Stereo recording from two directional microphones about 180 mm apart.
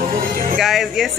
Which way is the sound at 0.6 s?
Centre (ahead or behind).